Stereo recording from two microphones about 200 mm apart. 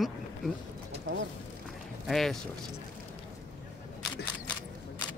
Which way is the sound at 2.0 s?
Centre (ahead or behind).